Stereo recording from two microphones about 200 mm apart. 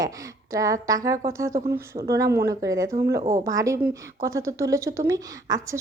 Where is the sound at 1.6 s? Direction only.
50° right (ahead or behind).